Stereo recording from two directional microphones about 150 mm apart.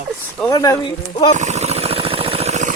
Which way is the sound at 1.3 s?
50° right (ahead or behind).